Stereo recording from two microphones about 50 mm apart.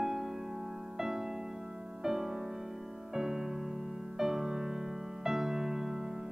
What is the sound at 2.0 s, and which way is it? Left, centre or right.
Music, centre.